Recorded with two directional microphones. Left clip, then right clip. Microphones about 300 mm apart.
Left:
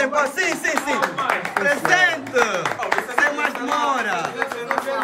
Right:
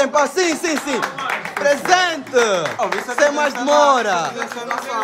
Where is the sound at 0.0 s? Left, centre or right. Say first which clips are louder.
Right 3 dB; centre.